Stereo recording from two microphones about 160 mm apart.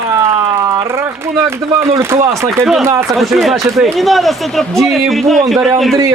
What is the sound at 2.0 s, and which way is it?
Speech, 15° right (ahead or behind).